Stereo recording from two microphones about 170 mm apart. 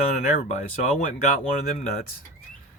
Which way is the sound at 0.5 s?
45° left (ahead or behind).